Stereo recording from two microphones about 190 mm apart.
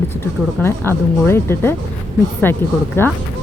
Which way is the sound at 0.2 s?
10° left (ahead or behind).